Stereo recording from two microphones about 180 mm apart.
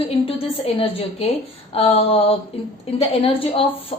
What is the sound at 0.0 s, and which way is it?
A woman's voice, 30° left (ahead or behind).